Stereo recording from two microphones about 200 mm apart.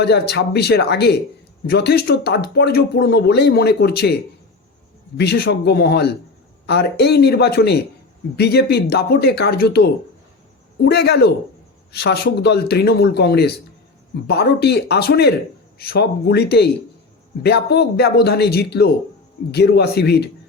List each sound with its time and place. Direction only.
0.0 s speech: 55° left (ahead or behind)
5.1 s speech: 55° left (ahead or behind)